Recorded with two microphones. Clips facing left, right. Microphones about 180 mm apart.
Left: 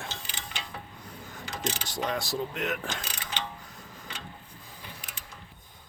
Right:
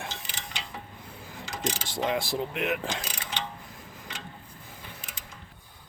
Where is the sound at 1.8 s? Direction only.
25° right (ahead or behind).